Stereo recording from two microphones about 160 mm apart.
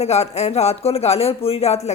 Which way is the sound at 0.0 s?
40° left (ahead or behind).